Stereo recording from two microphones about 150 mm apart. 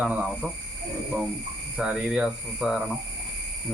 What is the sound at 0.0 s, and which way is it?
Speech, 5° right (ahead or behind).